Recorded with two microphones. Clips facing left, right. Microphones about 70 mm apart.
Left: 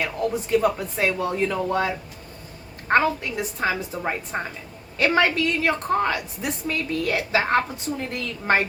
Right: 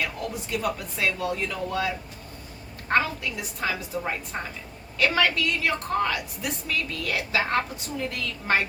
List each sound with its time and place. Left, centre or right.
0.2 s speech: left
2.9 s a woman's voice: left